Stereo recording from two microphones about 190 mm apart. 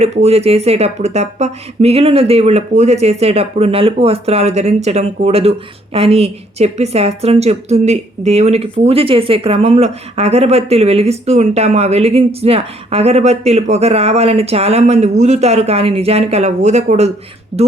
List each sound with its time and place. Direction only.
0.0 s speech: 35° right (ahead or behind)